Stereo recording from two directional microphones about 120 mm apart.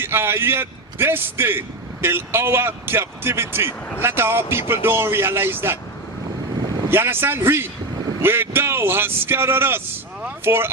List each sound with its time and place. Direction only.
0.0 s a man's voice: 20° right (ahead or behind)
6.9 s a man's voice: 20° right (ahead or behind)